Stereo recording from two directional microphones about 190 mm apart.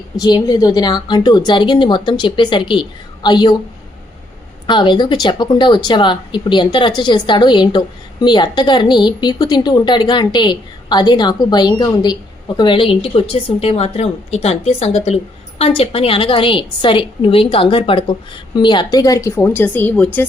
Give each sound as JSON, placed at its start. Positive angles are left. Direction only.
{"t": 0.2, "sound": "speech", "side_deg": 20}
{"t": 4.6, "sound": "a woman's voice", "side_deg": 25}